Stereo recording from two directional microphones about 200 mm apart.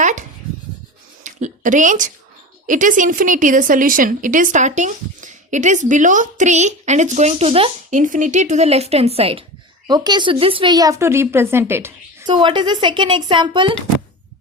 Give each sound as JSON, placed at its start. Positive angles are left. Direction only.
{"t": 0.0, "sound": "a sound", "side_deg": -40}
{"t": 2.6, "sound": "a woman's voice", "side_deg": -40}
{"t": 12.3, "sound": "speech", "side_deg": -25}